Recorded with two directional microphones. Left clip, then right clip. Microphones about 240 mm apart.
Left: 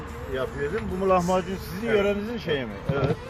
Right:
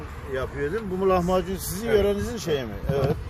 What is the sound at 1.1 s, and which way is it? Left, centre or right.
Speech, right.